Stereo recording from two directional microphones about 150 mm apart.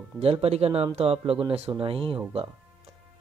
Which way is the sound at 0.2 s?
40° right (ahead or behind).